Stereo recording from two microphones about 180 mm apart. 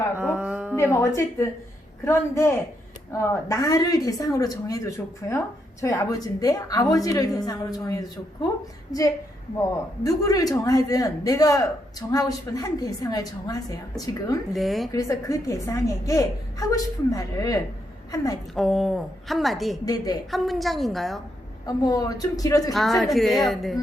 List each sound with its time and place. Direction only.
0.2 s a sound: 10° right (ahead or behind)
0.8 s a woman's voice: 15° left (ahead or behind)
10.0 s a man's voice: 20° left (ahead or behind)
14.5 s a woman's voice: centre (ahead or behind)
14.9 s a woman's voice: 15° left (ahead or behind)
18.5 s a woman's voice: centre (ahead or behind)
19.8 s a man's voice: 20° left (ahead or behind)
20.3 s a woman's voice: centre (ahead or behind)
21.7 s a man's voice: 20° left (ahead or behind)
22.7 s a woman's voice: centre (ahead or behind)